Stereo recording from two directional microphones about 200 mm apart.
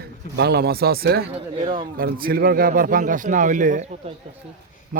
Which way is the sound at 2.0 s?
45° right (ahead or behind).